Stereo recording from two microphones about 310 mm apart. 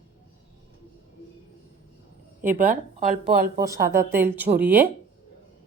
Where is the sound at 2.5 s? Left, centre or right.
Right.